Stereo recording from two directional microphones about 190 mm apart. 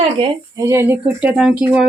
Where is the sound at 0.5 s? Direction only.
15° right (ahead or behind).